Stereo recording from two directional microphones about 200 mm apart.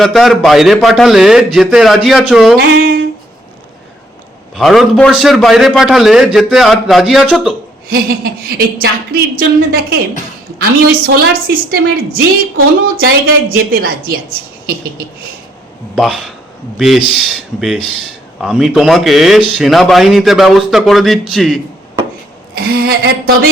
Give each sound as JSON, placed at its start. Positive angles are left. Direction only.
{"t": 0.0, "sound": "a man's voice", "side_deg": 0}
{"t": 2.6, "sound": "a sound", "side_deg": -50}
{"t": 4.5, "sound": "a man's voice", "side_deg": 0}
{"t": 7.9, "sound": "a woman's voice", "side_deg": -50}
{"t": 13.5, "sound": "a woman's voice", "side_deg": -45}
{"t": 16.0, "sound": "a man's voice", "side_deg": 0}
{"t": 22.5, "sound": "a woman's voice", "side_deg": -50}